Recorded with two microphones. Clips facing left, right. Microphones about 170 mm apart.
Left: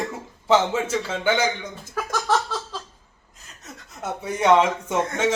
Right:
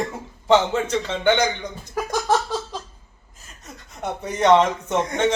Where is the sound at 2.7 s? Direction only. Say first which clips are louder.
Right 2 dB; 15° right (ahead or behind).